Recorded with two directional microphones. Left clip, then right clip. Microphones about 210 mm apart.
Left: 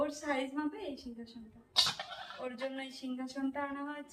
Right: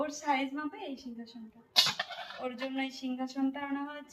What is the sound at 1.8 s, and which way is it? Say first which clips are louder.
Goat: right 4 dB; 45° right (ahead or behind).